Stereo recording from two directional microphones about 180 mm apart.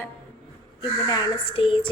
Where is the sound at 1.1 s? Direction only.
30° left (ahead or behind).